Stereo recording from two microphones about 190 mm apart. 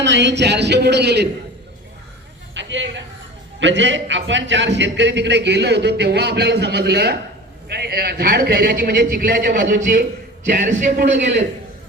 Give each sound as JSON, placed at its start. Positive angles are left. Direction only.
{"t": 0.0, "sound": "a man's voice", "side_deg": -65}
{"t": 2.6, "sound": "a man's voice", "side_deg": -75}